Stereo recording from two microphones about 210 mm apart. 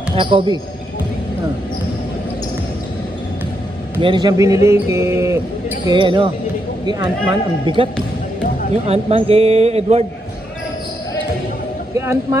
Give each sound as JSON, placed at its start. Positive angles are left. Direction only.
{"t": 0.1, "sound": "speech", "side_deg": -25}
{"t": 4.0, "sound": "a man's voice", "side_deg": -20}
{"t": 7.6, "sound": "speech", "side_deg": -25}
{"t": 11.9, "sound": "a man's voice", "side_deg": -15}